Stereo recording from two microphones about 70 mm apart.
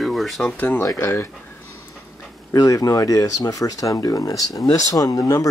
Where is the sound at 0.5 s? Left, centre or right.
Left.